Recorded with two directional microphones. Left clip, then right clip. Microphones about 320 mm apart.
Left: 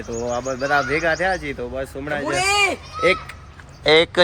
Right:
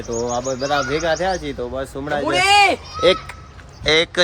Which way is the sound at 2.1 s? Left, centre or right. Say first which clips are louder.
Right 5 dB; right.